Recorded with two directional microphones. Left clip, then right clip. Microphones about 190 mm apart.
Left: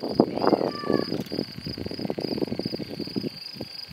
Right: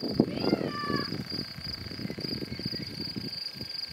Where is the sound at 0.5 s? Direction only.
45° left (ahead or behind).